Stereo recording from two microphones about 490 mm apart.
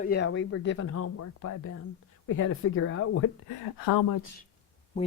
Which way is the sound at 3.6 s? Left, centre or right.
Left.